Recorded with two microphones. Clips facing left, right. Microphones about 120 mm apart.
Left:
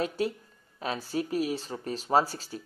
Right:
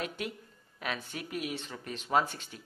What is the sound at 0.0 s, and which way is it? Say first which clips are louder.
Speech: left 8 dB; 35° left (ahead or behind).